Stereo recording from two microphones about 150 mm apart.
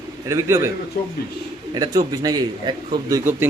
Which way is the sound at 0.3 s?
20° right (ahead or behind).